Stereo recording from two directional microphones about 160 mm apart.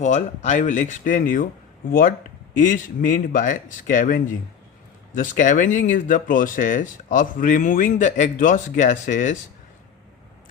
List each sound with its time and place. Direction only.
0.0 s speech: 50° left (ahead or behind)